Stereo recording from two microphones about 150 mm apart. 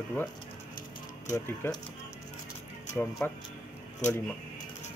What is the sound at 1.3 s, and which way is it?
Speech, 20° left (ahead or behind).